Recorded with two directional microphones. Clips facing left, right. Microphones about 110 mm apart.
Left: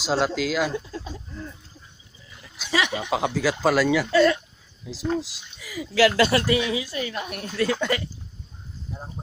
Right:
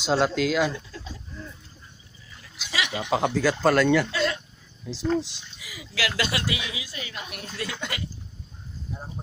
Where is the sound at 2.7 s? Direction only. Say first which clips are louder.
Left 5 dB; 30° left (ahead or behind).